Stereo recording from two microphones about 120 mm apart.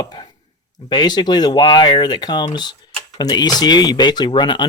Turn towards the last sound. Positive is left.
turn(degrees=40)  # may be behind; listen again after turning